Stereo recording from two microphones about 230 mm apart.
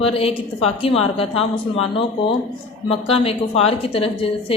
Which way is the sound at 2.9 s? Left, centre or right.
Left.